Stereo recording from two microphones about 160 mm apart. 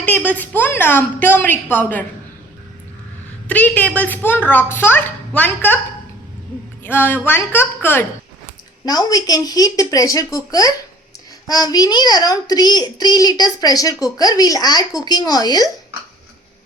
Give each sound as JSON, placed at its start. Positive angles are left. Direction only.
{"t": 0.0, "sound": "a woman's voice", "side_deg": 10}
{"t": 3.4, "sound": "a woman's voice", "side_deg": 10}
{"t": 6.8, "sound": "a woman's voice", "side_deg": 15}
{"t": 8.8, "sound": "a woman's voice", "side_deg": 25}